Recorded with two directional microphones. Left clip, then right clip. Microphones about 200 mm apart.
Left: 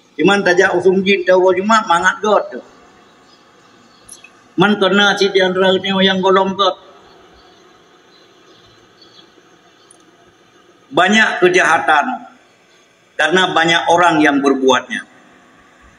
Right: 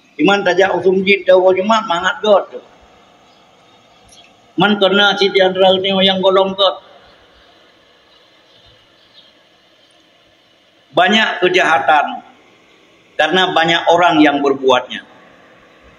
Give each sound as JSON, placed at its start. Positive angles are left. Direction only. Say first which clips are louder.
{"t": 0.2, "sound": "a man's voice", "louder": "even", "side_deg": 20}
{"t": 4.6, "sound": "a man's voice", "louder": "right 1 dB", "side_deg": 20}
{"t": 11.0, "sound": "a man's voice", "louder": "left 1 dB", "side_deg": 20}
{"t": 13.1, "sound": "a man's voice", "louder": "even", "side_deg": 20}